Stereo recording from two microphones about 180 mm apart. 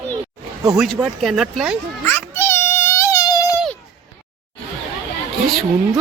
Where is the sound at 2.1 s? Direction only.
10° left (ahead or behind).